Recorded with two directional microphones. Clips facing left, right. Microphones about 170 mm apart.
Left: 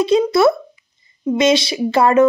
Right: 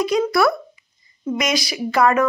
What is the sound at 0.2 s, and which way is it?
Speech, 25° left (ahead or behind).